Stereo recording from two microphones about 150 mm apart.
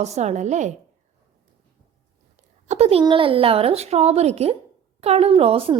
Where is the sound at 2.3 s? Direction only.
45° right (ahead or behind).